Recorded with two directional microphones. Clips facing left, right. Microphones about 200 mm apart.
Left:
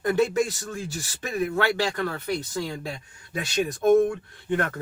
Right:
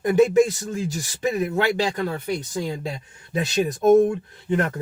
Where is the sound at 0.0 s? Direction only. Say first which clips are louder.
Right 6 dB; 20° right (ahead or behind).